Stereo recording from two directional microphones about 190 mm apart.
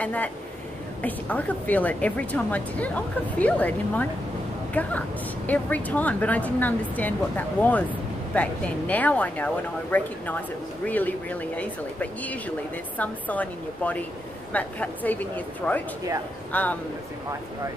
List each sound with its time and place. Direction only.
0.0 s a woman's voice: 10° left (ahead or behind)